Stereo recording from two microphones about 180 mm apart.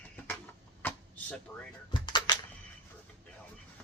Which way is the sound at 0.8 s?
10° left (ahead or behind).